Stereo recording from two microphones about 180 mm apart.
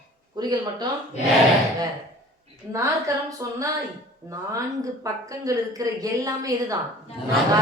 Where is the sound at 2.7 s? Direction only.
15° right (ahead or behind).